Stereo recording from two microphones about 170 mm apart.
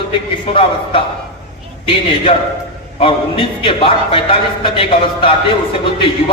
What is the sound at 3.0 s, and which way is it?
A man's voice, 30° left (ahead or behind).